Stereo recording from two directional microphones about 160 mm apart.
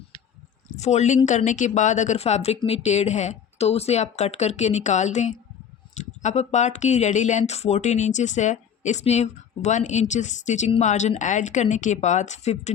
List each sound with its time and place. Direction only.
0.8 s speech: 45° left (ahead or behind)